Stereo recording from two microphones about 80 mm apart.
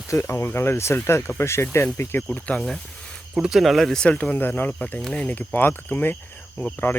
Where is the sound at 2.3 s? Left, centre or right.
Centre.